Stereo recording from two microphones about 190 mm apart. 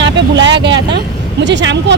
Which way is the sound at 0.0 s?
70° right (ahead or behind).